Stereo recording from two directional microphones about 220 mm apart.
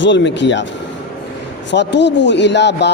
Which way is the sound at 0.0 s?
55° left (ahead or behind).